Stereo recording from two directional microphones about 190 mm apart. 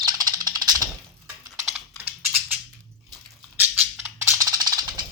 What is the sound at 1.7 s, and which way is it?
Typing, 5° right (ahead or behind).